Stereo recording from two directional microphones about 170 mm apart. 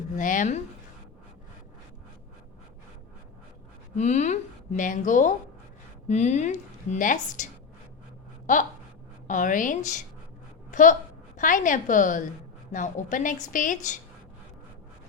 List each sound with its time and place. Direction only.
0.2 s a woman's voice: 50° left (ahead or behind)
3.9 s a woman's voice: 45° left (ahead or behind)
8.5 s a woman's voice: 45° left (ahead or behind)